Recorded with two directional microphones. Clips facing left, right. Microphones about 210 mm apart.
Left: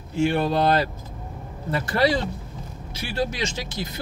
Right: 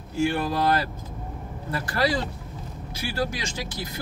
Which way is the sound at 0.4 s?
25° left (ahead or behind).